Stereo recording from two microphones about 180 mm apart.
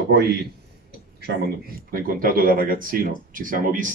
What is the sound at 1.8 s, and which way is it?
Speech, 50° right (ahead or behind).